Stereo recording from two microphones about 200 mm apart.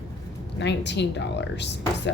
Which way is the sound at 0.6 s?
60° left (ahead or behind).